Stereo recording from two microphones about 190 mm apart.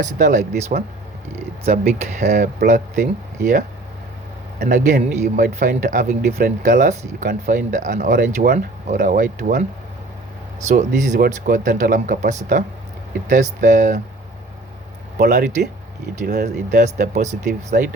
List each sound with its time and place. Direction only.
0.2 s speech: 45° right (ahead or behind)
4.6 s speech: 45° right (ahead or behind)
10.7 s speech: 40° right (ahead or behind)
15.2 s speech: 55° right (ahead or behind)
17.2 s speech: 40° right (ahead or behind)